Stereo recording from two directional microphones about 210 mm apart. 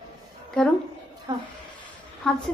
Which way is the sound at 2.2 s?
Centre (ahead or behind).